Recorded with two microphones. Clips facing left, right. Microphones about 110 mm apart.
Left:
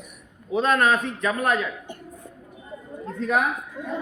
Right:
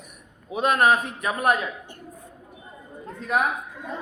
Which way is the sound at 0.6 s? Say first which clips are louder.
Even; 15° right (ahead or behind).